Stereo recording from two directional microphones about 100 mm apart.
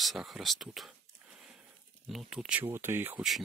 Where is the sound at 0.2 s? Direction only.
10° right (ahead or behind).